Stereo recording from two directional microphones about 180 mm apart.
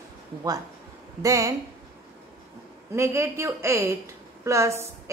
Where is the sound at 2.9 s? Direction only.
15° right (ahead or behind).